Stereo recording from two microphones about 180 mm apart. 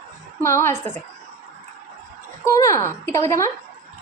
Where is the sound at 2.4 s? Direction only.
15° left (ahead or behind).